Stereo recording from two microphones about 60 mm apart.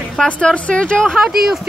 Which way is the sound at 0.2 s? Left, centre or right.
Centre.